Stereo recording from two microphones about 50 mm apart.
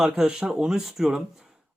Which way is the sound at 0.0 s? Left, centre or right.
Centre.